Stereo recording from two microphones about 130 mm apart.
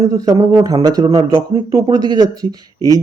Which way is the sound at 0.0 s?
25° right (ahead or behind).